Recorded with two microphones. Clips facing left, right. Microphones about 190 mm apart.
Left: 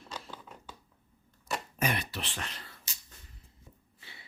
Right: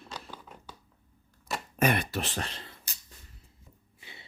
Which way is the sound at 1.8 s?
55° right (ahead or behind).